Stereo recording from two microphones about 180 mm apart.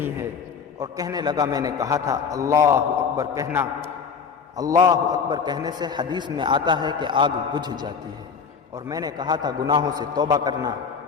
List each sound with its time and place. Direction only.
0.8 s a man's voice: 20° right (ahead or behind)